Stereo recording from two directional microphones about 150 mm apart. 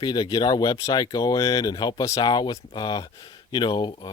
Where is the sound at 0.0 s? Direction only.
30° left (ahead or behind).